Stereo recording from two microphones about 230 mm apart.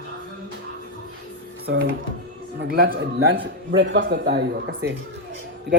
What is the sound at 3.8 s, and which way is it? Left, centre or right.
A man's voice, right.